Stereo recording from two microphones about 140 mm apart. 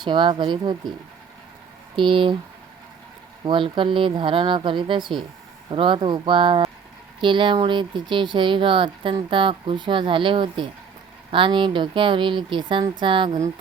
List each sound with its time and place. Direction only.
0.0 s speech: 35° right (ahead or behind)
2.0 s speech: 35° right (ahead or behind)
3.4 s speech: 35° right (ahead or behind)